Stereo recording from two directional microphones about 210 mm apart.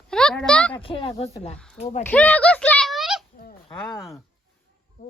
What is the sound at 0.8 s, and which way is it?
Speech, 25° left (ahead or behind).